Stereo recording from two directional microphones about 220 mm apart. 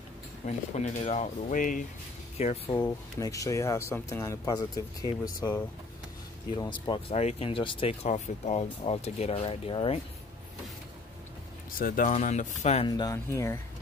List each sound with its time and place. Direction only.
0.5 s speech: 30° left (ahead or behind)
11.8 s speech: 40° left (ahead or behind); by 13.6 s 10° left (ahead or behind)